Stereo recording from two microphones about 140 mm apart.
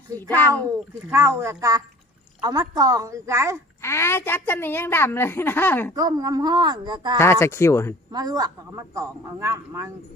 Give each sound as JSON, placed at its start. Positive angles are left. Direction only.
{"t": 0.2, "sound": "a woman's voice", "side_deg": 15}
{"t": 1.1, "sound": "a woman's voice", "side_deg": -20}
{"t": 3.8, "sound": "a woman's voice", "side_deg": 20}
{"t": 5.9, "sound": "a woman's voice", "side_deg": -25}
{"t": 7.2, "sound": "speech", "side_deg": 20}
{"t": 8.1, "sound": "a woman's voice", "side_deg": -30}